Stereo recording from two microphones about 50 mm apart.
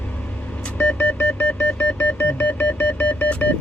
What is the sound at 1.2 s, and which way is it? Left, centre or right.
Music, left.